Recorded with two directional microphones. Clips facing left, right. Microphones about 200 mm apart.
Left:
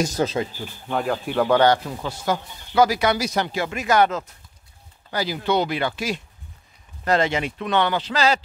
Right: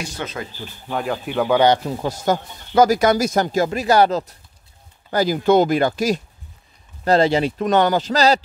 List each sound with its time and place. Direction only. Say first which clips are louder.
0.0 s speech: left 7 dB; 40° left (ahead or behind)
0.6 s speech: even; centre (ahead or behind)
1.6 s speech: right 2 dB; 20° right (ahead or behind)
2.0 s speech: right 4 dB; 40° right (ahead or behind)
5.1 s speech: right 7 dB; 45° right (ahead or behind)